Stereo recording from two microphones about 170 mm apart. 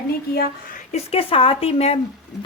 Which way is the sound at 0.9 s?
35° left (ahead or behind).